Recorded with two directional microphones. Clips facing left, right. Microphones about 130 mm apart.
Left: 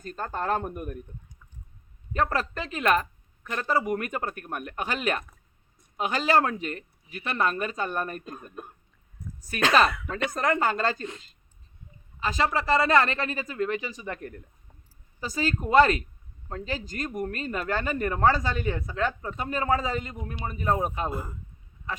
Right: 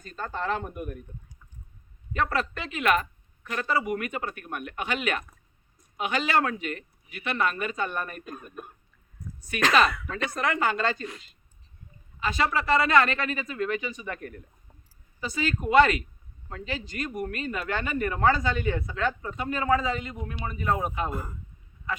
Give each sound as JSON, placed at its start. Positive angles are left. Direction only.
{"t": 0.0, "sound": "speech", "side_deg": 45}
{"t": 2.1, "sound": "speech", "side_deg": 40}
{"t": 9.4, "sound": "speech", "side_deg": 40}
{"t": 12.2, "sound": "speech", "side_deg": 35}